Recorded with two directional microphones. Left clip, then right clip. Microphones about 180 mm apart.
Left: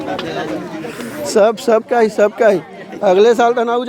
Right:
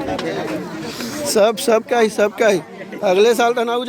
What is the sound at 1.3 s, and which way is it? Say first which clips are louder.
A man's voice: left 3 dB; 15° left (ahead or behind).